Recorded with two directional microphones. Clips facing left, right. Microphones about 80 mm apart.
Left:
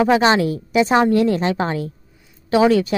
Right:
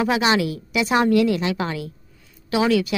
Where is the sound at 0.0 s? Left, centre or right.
Left.